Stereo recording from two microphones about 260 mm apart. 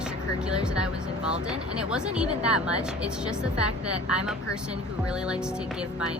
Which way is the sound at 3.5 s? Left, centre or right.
Left.